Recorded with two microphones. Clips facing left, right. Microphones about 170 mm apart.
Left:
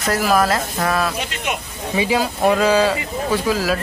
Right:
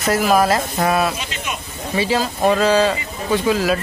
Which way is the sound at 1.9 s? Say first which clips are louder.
Even; 10° left (ahead or behind).